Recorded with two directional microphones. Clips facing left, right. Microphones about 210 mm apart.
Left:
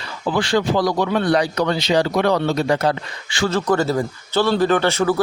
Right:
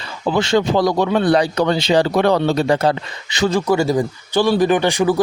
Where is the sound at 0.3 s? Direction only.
25° right (ahead or behind).